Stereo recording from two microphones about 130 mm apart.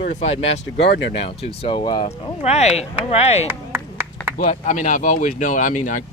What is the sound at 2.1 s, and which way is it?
Speech, 55° left (ahead or behind).